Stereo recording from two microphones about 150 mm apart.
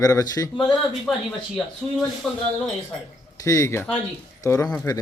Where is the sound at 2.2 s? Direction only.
Centre (ahead or behind).